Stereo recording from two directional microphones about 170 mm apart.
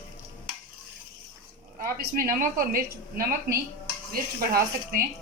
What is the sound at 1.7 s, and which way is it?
A woman's voice, 55° right (ahead or behind).